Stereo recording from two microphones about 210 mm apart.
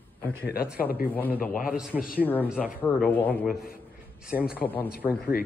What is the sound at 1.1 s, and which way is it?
Speech, 10° left (ahead or behind).